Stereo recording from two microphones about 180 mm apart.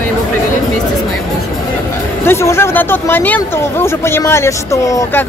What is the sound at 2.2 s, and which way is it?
Speech, 15° left (ahead or behind).